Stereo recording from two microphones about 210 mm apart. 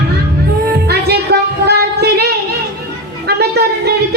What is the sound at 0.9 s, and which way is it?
Music, 50° right (ahead or behind).